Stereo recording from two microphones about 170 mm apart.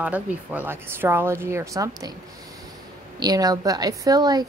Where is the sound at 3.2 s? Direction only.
20° right (ahead or behind).